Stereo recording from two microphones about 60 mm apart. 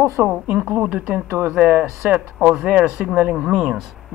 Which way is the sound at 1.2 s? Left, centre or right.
Right.